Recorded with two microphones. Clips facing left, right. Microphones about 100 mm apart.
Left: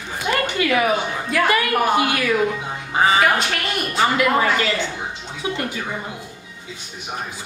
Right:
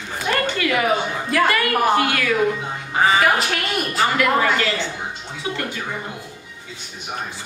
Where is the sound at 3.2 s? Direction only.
Centre (ahead or behind).